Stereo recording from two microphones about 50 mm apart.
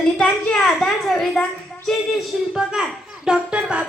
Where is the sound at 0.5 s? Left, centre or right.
Centre.